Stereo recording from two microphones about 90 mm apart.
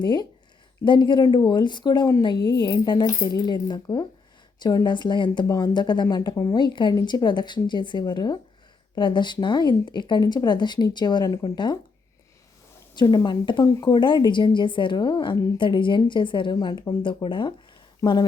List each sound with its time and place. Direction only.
0.0 s a woman's voice: 55° left (ahead or behind)
2.2 s a woman's voice: 55° left (ahead or behind)
6.3 s speech: 40° left (ahead or behind)
6.6 s a woman's voice: 60° left (ahead or behind)
13.0 s a woman's voice: 50° left (ahead or behind)
18.0 s speech: 50° left (ahead or behind)